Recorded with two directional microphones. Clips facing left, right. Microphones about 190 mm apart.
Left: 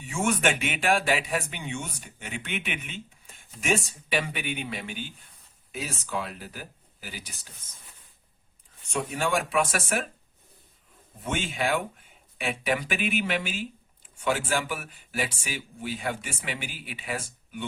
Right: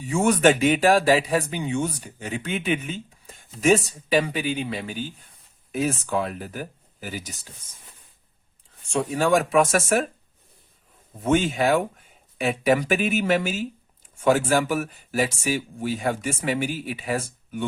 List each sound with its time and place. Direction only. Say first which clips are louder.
0.0 s speech: right 7 dB; 40° right (ahead or behind)
5.7 s speech: right 9 dB; 50° right (ahead or behind)
8.9 s speech: right 7 dB; 35° right (ahead or behind)
11.2 s speech: right 9 dB; 45° right (ahead or behind)